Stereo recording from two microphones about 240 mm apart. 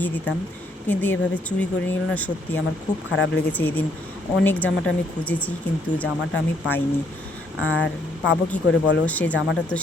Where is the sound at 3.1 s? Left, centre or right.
Left.